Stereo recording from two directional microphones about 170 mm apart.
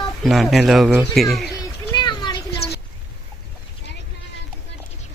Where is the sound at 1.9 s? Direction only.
25° left (ahead or behind).